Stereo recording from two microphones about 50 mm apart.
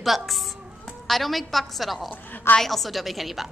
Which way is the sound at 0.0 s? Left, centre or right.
Centre.